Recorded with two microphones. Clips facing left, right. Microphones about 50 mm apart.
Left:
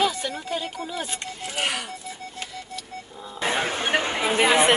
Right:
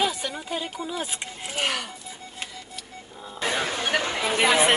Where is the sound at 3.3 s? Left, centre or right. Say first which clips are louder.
Left 2 dB; left.